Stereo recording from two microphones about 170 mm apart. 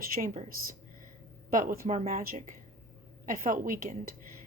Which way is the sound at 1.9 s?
45° right (ahead or behind).